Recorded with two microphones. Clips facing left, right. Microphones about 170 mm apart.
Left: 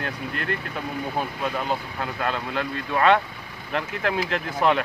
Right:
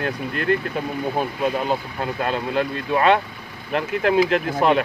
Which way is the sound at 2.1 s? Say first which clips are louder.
Right 5 dB; 25° right (ahead or behind).